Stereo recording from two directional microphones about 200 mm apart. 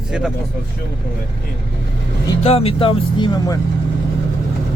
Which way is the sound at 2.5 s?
30° left (ahead or behind).